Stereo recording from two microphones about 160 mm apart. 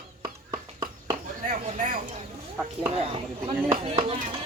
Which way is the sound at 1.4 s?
55° right (ahead or behind).